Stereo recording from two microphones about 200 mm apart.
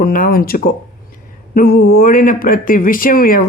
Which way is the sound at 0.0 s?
45° left (ahead or behind).